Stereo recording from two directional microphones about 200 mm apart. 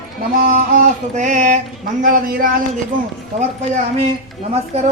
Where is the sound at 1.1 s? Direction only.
40° right (ahead or behind).